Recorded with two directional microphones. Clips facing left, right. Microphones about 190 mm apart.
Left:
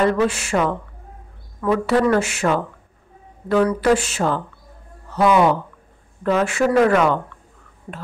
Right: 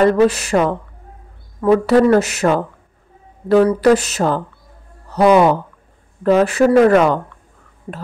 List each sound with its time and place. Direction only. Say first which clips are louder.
0.0 s a woman's voice: right 5 dB; 40° right (ahead or behind)